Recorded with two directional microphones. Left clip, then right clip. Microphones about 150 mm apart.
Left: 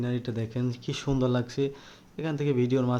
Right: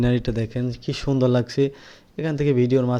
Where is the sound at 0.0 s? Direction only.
55° right (ahead or behind).